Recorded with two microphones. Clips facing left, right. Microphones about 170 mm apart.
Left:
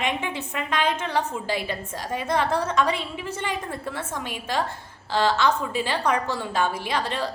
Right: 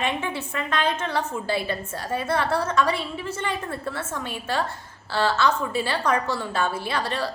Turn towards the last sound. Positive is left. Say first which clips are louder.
# even
turn(degrees=15)  # may be behind; listen again after turning